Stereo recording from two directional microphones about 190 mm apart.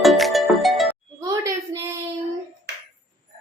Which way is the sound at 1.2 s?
15° right (ahead or behind).